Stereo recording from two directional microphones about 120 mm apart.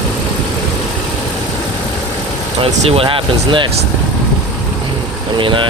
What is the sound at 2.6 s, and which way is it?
Speech, 50° right (ahead or behind).